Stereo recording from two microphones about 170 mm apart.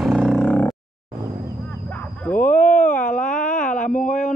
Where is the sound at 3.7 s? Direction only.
50° left (ahead or behind).